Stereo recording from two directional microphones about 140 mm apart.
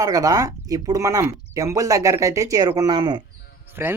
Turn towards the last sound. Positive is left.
turn(degrees=-15)  # may be behind; listen again after turning